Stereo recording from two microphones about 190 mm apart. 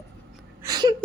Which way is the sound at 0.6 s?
20° right (ahead or behind).